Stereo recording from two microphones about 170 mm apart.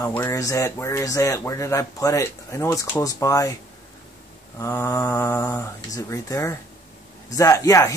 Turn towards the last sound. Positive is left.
turn(degrees=20)  # may be behind; listen again after turning